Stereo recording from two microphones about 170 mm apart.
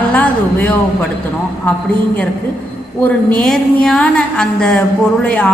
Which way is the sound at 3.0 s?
5° left (ahead or behind).